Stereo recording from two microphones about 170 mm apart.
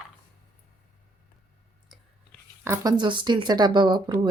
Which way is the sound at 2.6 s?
25° right (ahead or behind).